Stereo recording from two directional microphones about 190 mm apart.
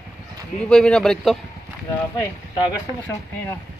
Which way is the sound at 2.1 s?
20° left (ahead or behind).